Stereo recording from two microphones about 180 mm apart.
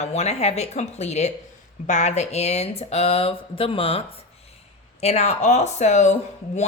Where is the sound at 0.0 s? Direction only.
35° left (ahead or behind).